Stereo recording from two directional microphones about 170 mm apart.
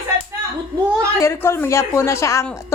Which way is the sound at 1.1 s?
15° left (ahead or behind).